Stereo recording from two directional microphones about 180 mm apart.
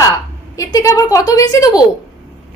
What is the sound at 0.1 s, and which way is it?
A woman's voice, 20° left (ahead or behind).